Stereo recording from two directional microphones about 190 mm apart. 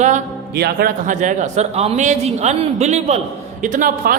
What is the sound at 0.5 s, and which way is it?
A man's voice, 55° right (ahead or behind).